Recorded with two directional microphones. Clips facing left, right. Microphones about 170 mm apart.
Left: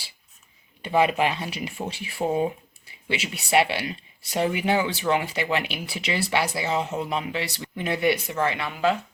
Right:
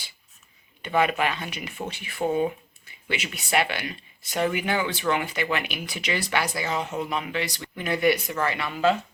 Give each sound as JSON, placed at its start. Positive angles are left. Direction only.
{"t": 0.8, "sound": "speech", "side_deg": 30}